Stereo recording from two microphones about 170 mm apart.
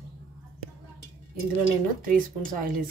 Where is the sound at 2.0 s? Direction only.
55° right (ahead or behind).